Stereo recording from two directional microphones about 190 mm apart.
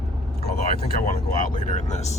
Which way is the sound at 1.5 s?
40° left (ahead or behind).